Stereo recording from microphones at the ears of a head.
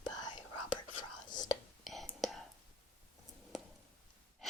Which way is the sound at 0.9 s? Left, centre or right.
Left.